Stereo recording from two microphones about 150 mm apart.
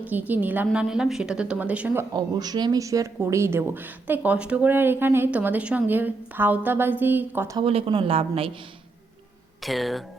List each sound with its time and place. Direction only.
0.0 s a man's voice: 10° right (ahead or behind)
2.1 s a man's voice: 25° right (ahead or behind)
7.5 s a woman's voice: 40° right (ahead or behind)
9.6 s speech: centre (ahead or behind)